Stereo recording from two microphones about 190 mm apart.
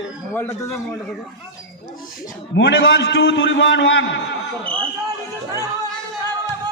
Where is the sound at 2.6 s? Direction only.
75° left (ahead or behind).